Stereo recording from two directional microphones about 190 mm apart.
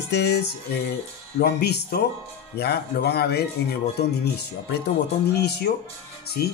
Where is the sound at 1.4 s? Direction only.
60° left (ahead or behind).